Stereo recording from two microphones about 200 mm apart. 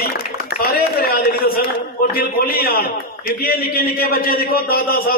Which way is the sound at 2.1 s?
50° left (ahead or behind).